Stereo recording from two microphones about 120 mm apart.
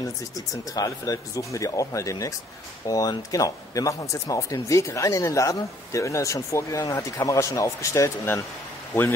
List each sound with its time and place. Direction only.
0.7 s speech: 30° left (ahead or behind)